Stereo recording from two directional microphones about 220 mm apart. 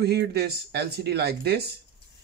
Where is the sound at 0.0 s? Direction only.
45° right (ahead or behind).